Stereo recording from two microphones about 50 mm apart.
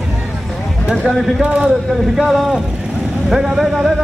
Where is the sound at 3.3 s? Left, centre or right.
Centre.